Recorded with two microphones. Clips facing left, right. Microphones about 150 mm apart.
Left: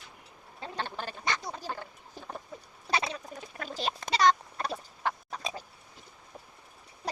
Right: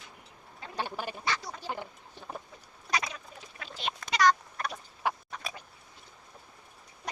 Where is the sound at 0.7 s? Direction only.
10° right (ahead or behind).